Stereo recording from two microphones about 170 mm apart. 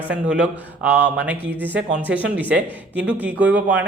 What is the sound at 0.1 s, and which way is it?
Speech, 5° right (ahead or behind).